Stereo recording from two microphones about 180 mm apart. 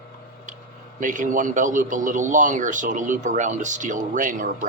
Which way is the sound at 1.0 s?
45° right (ahead or behind).